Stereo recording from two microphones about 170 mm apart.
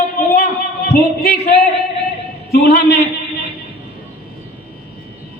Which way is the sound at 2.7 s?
80° left.